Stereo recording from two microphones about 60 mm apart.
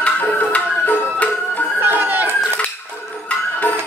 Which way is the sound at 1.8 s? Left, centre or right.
Right.